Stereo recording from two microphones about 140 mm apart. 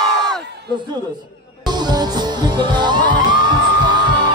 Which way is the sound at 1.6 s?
30° right (ahead or behind).